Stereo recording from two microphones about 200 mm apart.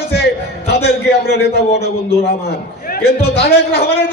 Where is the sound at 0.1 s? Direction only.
55° left (ahead or behind).